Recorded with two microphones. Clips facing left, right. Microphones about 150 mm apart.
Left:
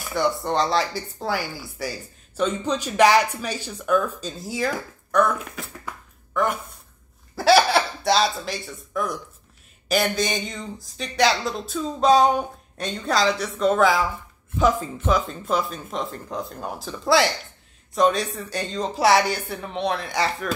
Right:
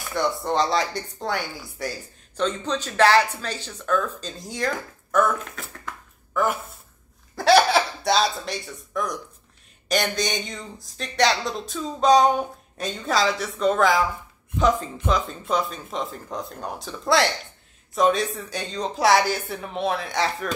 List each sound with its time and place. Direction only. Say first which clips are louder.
0.1 s speech: left 1 dB; centre (ahead or behind)
15.0 s speech: left 2 dB; centre (ahead or behind)